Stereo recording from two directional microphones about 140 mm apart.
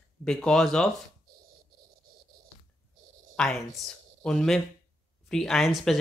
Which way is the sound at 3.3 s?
5° left (ahead or behind).